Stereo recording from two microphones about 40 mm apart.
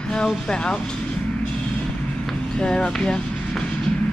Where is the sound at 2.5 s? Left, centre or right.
Left.